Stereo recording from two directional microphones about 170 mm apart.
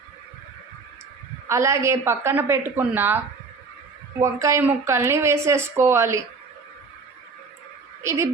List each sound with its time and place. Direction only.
1.5 s speech: 15° right (ahead or behind)
4.2 s speech: 20° right (ahead or behind)
8.0 s speech: 15° right (ahead or behind)